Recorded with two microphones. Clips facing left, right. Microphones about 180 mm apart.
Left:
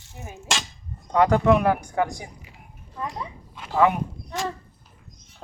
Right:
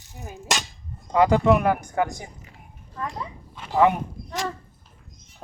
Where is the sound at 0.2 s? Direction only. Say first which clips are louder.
Right 1 dB; centre (ahead or behind).